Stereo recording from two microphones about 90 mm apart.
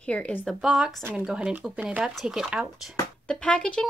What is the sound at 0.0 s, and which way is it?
Speech, 15° left (ahead or behind).